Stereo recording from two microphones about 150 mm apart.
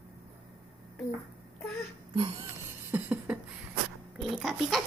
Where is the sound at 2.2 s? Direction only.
35° right (ahead or behind).